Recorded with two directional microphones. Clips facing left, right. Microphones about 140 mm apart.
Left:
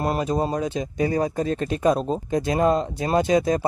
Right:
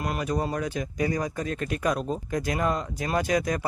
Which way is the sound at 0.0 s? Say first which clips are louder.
Left 5 dB; 30° left (ahead or behind).